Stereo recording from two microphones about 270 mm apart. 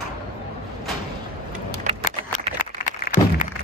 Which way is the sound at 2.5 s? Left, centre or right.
Left.